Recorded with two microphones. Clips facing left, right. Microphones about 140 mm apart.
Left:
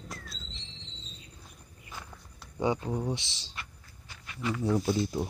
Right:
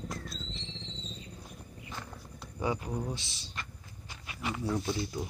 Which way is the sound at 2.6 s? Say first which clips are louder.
Left 4 dB; 25° left (ahead or behind).